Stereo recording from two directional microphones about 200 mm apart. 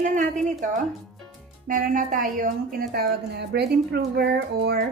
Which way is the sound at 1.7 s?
45° right (ahead or behind).